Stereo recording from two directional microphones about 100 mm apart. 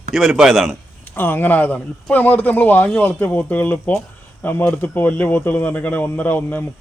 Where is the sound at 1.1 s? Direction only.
20° left (ahead or behind).